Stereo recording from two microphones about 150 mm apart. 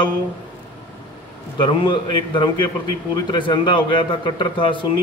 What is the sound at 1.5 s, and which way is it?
Speech, 30° left (ahead or behind).